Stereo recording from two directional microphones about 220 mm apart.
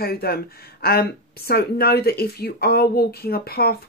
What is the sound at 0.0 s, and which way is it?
Speech, 45° left (ahead or behind).